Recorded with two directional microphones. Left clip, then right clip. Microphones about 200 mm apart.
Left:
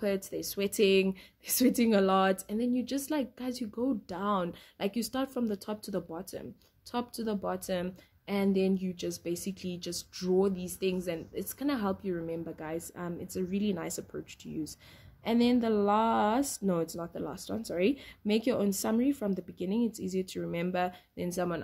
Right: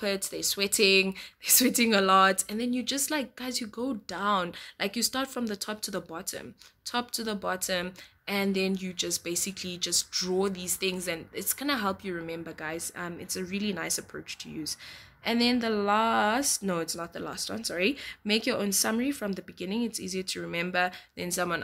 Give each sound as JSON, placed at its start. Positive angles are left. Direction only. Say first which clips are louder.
{"t": 0.0, "sound": "speech", "louder": "right 2 dB", "side_deg": -5}
{"t": 3.7, "sound": "speech", "louder": "left 1 dB", "side_deg": -20}
{"t": 4.1, "sound": "speech", "louder": "right 4 dB", "side_deg": -5}